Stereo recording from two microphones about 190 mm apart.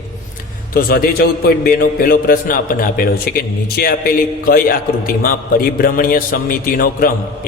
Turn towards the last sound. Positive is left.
turn(degrees=50)  # may be behind; listen again after turning